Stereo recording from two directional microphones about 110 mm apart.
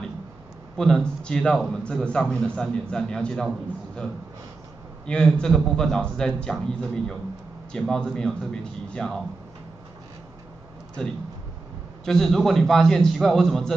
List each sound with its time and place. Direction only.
0.7 s a man's voice: 5° left (ahead or behind)
5.0 s a man's voice: 5° left (ahead or behind)
12.0 s a man's voice: 5° left (ahead or behind)